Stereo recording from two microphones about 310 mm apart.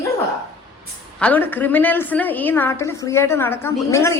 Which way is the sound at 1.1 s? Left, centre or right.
Centre.